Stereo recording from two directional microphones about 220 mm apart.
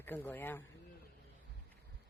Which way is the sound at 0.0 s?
10° left (ahead or behind).